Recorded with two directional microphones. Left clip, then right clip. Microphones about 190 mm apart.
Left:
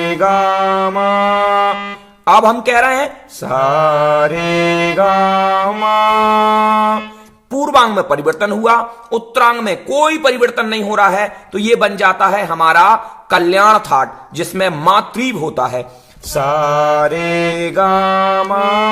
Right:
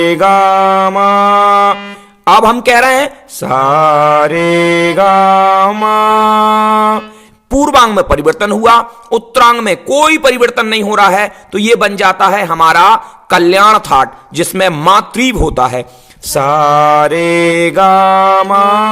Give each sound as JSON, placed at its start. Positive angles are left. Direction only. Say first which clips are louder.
{"t": 0.0, "sound": "a man's voice", "louder": "right 5 dB", "side_deg": -40}